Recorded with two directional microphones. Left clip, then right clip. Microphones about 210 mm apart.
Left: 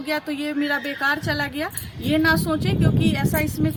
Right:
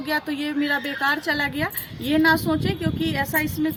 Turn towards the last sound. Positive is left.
turn(degrees=10)  # may be behind; listen again after turning